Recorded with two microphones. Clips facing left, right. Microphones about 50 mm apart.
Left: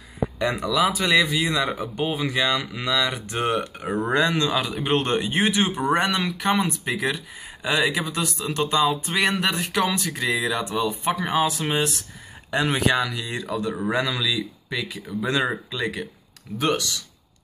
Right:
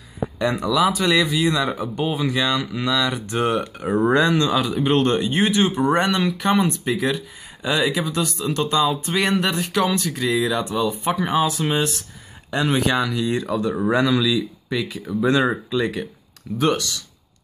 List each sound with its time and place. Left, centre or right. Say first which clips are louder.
0.4 s speech: right 3 dB; centre
6.9 s speech: right 3 dB; centre
13.4 s speech: right 4 dB; centre
16.5 s speech: right 3 dB; centre